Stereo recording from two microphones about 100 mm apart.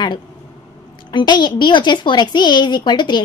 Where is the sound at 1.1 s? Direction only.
45° left (ahead or behind).